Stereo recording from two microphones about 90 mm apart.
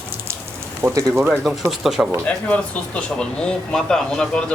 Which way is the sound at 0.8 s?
25° right (ahead or behind).